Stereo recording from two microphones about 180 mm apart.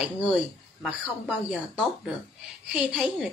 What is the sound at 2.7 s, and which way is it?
Speech, 5° right (ahead or behind).